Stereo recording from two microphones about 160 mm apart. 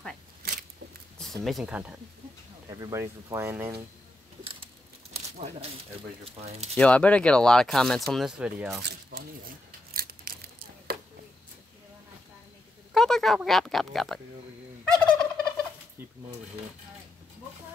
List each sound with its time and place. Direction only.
1.1 s speech: centre (ahead or behind)
2.8 s speech: 20° right (ahead or behind)
6.2 s speech: 40° right (ahead or behind)
6.8 s speech: 10° left (ahead or behind); by 8.6 s 5° right (ahead or behind)
9.9 s a sound: 65° right (ahead or behind)
12.9 s speech: 5° left (ahead or behind)
15.0 s fowl: 5° left (ahead or behind)